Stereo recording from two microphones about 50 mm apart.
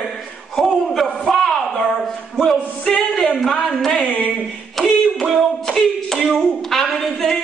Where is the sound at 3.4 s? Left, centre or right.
Centre.